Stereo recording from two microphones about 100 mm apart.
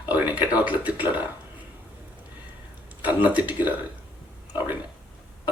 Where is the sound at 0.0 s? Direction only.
20° right (ahead or behind).